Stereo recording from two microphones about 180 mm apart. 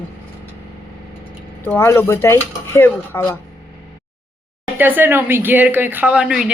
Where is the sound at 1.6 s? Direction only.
10° left (ahead or behind).